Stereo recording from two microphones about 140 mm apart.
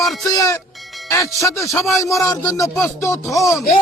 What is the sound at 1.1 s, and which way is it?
Speech, 20° left (ahead or behind).